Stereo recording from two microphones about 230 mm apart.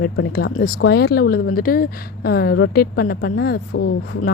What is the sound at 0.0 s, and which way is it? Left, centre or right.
Speech, left.